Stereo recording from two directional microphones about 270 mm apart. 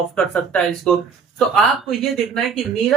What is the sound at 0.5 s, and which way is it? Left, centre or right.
A woman's voice, centre.